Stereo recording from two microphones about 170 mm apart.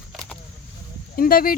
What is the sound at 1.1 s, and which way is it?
Speech, 55° left (ahead or behind).